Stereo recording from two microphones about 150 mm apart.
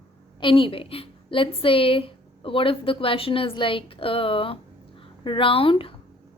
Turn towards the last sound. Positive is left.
turn(degrees=35)  # may be behind; listen again after turning